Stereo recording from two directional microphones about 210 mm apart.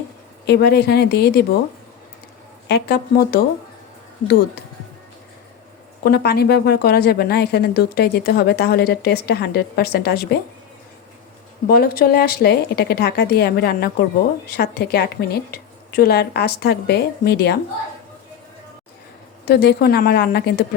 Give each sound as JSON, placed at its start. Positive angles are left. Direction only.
{"t": 0.4, "sound": "a woman's voice", "side_deg": 50}
{"t": 2.6, "sound": "a woman's voice", "side_deg": 50}
{"t": 6.0, "sound": "a woman's voice", "side_deg": 45}
{"t": 11.7, "sound": "a woman's voice", "side_deg": 45}
{"t": 19.5, "sound": "a woman's voice", "side_deg": 50}